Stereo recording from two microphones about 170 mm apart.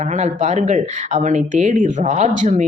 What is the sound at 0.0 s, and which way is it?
Speech, 45° right (ahead or behind).